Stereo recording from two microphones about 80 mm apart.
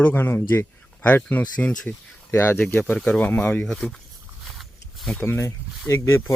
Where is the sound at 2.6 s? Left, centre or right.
Centre.